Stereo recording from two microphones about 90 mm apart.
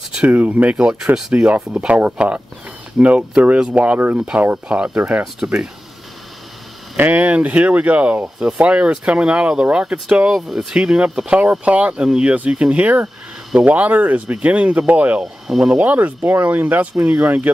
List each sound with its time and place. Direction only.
0.3 s speech: 20° right (ahead or behind)
7.0 s speech: 20° right (ahead or behind)
15.4 s speech: 5° right (ahead or behind)
15.8 s speech: 20° right (ahead or behind)